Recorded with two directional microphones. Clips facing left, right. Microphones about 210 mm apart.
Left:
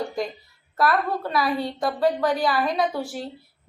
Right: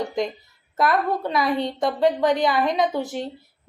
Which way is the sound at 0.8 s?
20° right (ahead or behind).